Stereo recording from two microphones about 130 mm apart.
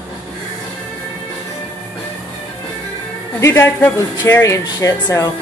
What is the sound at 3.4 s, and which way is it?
Speech, 20° left (ahead or behind).